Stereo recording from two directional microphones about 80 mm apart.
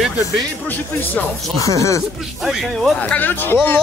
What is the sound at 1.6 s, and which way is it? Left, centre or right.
Speech, left.